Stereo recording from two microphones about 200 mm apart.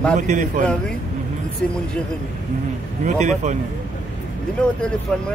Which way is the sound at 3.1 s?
35° right (ahead or behind).